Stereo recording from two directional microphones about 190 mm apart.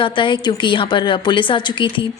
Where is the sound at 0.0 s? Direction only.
25° left (ahead or behind).